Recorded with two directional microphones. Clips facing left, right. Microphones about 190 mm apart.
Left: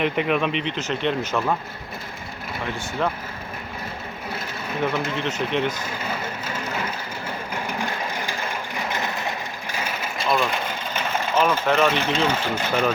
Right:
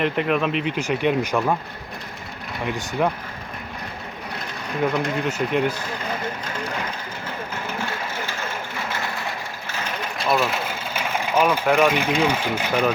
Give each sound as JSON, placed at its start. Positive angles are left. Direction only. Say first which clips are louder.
{"t": 0.0, "sound": "speech", "louder": "right 1 dB", "side_deg": 0}
{"t": 3.0, "sound": "speech", "louder": "right 3 dB", "side_deg": -10}
{"t": 4.9, "sound": "speech", "louder": "right 4 dB", "side_deg": 5}
{"t": 5.2, "sound": "speech", "louder": "right 2 dB", "side_deg": -10}
{"t": 7.5, "sound": "a sound", "louder": "left 2 dB", "side_deg": 15}
{"t": 9.7, "sound": "vehicle", "louder": "even", "side_deg": 10}